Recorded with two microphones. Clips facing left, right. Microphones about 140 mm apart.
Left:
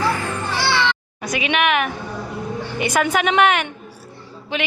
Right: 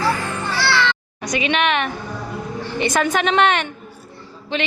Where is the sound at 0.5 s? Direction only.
20° left (ahead or behind).